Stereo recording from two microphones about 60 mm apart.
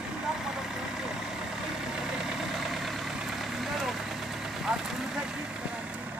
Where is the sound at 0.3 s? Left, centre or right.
Centre.